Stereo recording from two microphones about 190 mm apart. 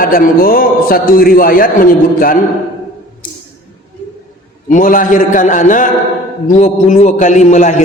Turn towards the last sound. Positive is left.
turn(degrees=40)  # may be behind; listen again after turning